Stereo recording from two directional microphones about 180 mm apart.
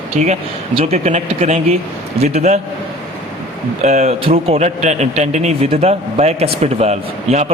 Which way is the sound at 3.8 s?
40° right (ahead or behind).